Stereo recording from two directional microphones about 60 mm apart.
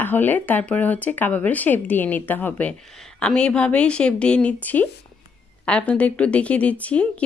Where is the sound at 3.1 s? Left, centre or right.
Centre.